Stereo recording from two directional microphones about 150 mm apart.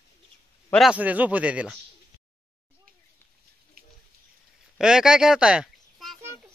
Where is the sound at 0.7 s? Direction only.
Centre (ahead or behind).